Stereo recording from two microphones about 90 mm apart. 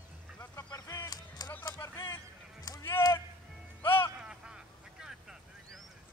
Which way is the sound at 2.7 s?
45° left (ahead or behind).